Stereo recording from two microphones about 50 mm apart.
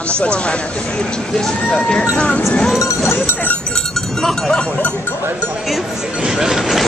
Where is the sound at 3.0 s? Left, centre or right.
Centre.